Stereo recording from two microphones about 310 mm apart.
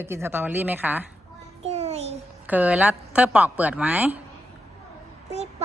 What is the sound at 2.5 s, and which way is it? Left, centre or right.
Speech, centre.